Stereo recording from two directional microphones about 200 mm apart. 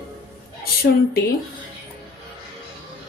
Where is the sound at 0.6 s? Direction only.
50° left (ahead or behind).